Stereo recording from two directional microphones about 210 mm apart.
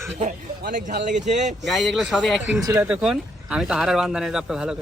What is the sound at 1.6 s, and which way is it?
Speech, centre (ahead or behind).